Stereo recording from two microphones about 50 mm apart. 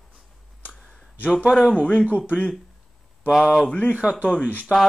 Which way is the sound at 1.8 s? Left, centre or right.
Left.